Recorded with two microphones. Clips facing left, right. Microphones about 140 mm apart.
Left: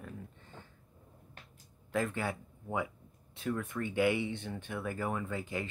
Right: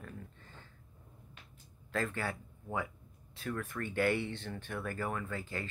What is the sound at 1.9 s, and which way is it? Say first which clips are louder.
Speech: left 2 dB; 15° left (ahead or behind).